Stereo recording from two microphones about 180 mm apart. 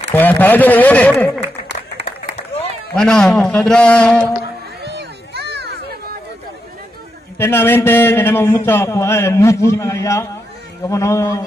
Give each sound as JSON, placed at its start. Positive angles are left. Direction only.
{"t": 0.1, "sound": "a man's voice", "side_deg": 10}
{"t": 2.9, "sound": "a man's voice", "side_deg": 5}
{"t": 4.8, "sound": "a sound", "side_deg": -65}
{"t": 7.3, "sound": "a man's voice", "side_deg": 15}